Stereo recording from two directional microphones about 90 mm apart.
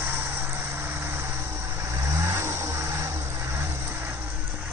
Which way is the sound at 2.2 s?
30° right (ahead or behind).